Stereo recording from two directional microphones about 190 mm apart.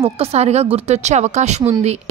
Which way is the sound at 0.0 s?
35° right (ahead or behind).